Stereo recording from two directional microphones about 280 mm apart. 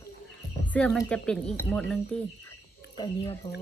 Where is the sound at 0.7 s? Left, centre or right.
Centre.